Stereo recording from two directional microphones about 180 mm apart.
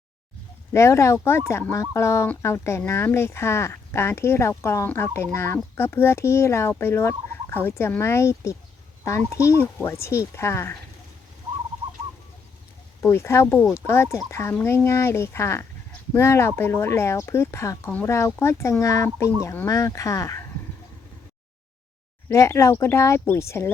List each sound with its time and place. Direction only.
0.7 s speech: 15° left (ahead or behind)
13.0 s speech: 15° left (ahead or behind)
22.3 s speech: 15° left (ahead or behind)